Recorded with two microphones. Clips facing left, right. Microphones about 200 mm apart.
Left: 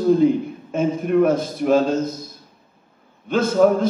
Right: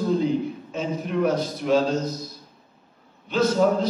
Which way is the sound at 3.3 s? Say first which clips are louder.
Left 4 dB; 50° left (ahead or behind).